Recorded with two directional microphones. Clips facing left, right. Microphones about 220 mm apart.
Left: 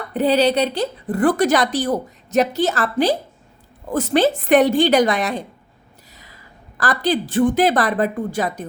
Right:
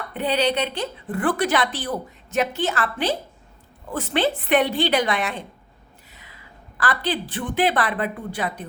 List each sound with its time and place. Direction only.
0.1 s a woman's voice: 40° left (ahead or behind)